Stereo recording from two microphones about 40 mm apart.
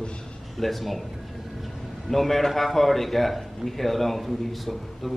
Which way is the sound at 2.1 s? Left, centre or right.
Centre.